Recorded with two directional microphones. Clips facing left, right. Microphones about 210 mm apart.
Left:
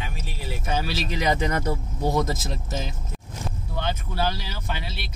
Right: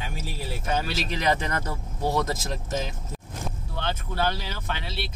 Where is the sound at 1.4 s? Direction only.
15° left (ahead or behind).